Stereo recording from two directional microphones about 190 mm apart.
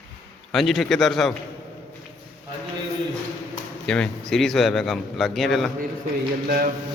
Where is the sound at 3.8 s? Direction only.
5° left (ahead or behind).